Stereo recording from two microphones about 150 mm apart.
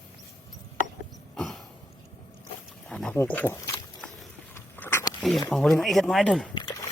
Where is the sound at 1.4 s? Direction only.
Centre (ahead or behind).